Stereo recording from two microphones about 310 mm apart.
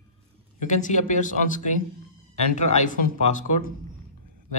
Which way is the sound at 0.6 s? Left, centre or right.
Left.